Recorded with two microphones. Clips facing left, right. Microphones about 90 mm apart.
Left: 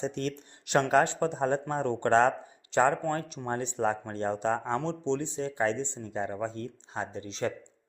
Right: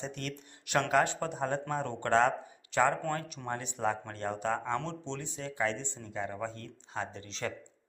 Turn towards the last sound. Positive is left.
turn(degrees=20)  # may be behind; listen again after turning